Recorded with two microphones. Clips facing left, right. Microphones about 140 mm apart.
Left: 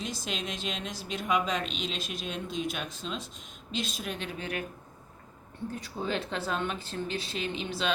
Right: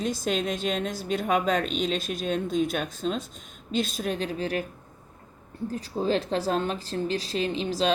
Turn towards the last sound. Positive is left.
turn(degrees=-35)  # may be behind; listen again after turning